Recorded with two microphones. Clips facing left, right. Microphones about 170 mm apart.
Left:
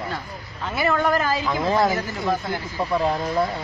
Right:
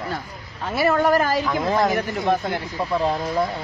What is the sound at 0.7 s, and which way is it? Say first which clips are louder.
Speech: right 3 dB; 35° right (ahead or behind).